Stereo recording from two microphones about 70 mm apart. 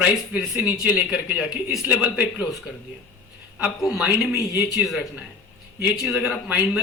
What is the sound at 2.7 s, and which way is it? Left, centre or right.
Speech, centre.